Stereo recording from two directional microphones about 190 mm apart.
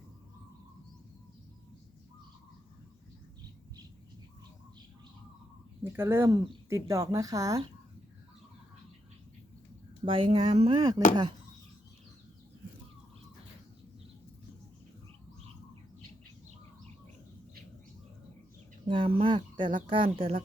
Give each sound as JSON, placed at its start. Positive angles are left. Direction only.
{"t": 5.8, "sound": "speech", "side_deg": -15}
{"t": 10.1, "sound": "speech", "side_deg": -30}
{"t": 18.9, "sound": "speech", "side_deg": -30}